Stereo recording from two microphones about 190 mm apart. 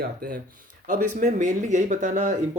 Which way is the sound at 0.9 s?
40° right (ahead or behind).